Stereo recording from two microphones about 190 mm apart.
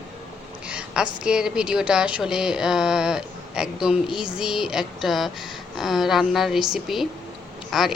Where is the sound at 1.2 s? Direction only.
5° right (ahead or behind).